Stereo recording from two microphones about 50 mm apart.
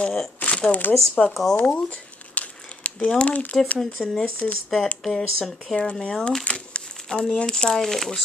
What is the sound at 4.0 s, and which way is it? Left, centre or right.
Speech, centre.